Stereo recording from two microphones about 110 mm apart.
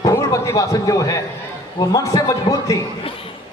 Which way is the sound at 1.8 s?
30° left (ahead or behind).